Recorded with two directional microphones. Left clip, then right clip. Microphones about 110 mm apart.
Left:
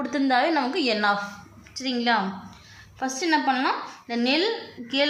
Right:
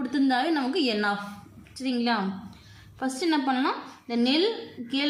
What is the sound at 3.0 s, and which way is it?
A woman's voice, 40° right (ahead or behind).